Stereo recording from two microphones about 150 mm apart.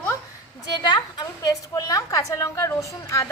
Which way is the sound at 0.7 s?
30° left (ahead or behind).